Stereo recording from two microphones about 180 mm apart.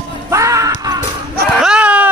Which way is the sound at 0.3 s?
15° right (ahead or behind).